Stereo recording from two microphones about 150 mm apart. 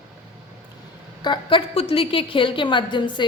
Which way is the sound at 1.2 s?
30° left (ahead or behind).